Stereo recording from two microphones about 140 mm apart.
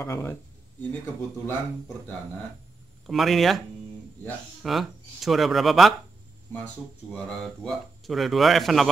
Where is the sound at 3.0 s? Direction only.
Centre (ahead or behind).